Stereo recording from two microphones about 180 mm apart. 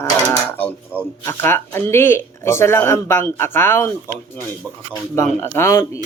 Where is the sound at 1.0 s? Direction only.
10° left (ahead or behind).